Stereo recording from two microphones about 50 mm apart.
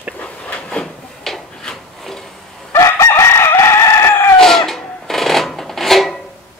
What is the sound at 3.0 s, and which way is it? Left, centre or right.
Crowing, left.